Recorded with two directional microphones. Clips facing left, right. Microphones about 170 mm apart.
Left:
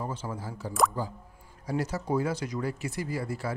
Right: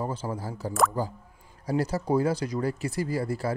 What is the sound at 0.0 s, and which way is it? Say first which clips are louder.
Speech: right 4 dB; 35° right (ahead or behind).